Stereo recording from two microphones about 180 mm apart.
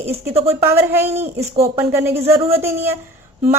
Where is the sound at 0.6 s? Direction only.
15° right (ahead or behind).